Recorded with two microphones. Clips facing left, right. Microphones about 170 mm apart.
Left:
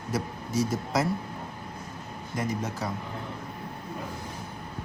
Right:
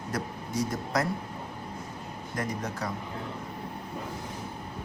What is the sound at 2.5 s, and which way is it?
Speech, 5° left (ahead or behind).